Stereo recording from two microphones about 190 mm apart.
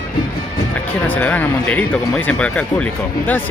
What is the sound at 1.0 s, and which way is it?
Speech, 10° left (ahead or behind).